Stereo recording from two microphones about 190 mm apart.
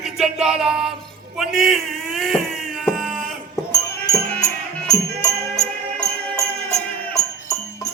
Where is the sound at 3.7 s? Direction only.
15° left (ahead or behind).